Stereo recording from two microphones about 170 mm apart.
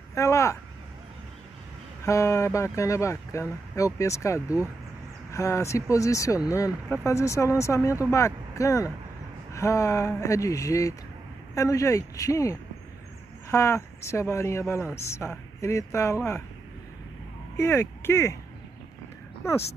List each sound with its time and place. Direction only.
0.1 s speech: 15° left (ahead or behind)
2.0 s speech: 15° left (ahead or behind)
17.6 s speech: 15° left (ahead or behind)